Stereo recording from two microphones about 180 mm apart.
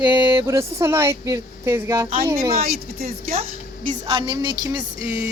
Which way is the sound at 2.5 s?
55° right (ahead or behind).